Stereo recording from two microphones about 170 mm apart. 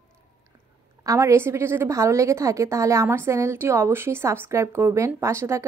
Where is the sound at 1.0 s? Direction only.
20° right (ahead or behind).